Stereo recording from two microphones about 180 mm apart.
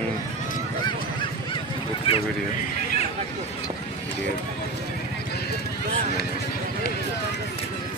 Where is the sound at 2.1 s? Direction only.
30° left (ahead or behind).